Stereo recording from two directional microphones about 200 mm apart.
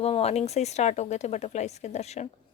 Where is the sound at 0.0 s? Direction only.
30° left (ahead or behind).